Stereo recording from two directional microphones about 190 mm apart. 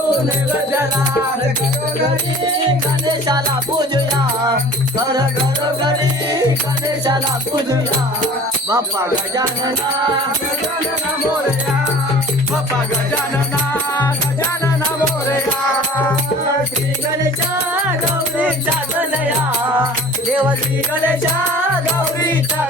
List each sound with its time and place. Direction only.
3.1 s speech: 20° right (ahead or behind)
8.7 s speech: 20° right (ahead or behind)